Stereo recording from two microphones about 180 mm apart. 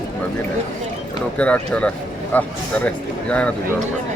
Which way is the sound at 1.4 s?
5° left (ahead or behind).